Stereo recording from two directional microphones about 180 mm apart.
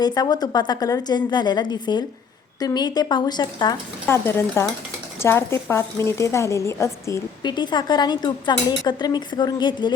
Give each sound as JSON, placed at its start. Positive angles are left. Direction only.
{"t": 0.0, "sound": "a woman's voice", "side_deg": 20}
{"t": 4.0, "sound": "a woman's voice", "side_deg": 15}